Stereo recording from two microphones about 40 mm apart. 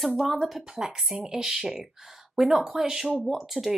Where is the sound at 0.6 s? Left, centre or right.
Centre.